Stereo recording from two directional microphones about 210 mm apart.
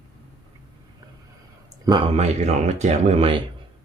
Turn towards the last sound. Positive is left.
turn(degrees=-25)  # may be behind; listen again after turning